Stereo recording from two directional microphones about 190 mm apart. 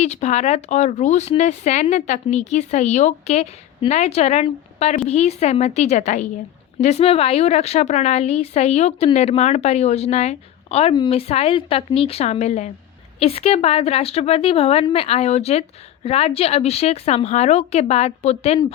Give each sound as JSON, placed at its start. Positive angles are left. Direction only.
{"t": 0.0, "sound": "speech", "side_deg": 35}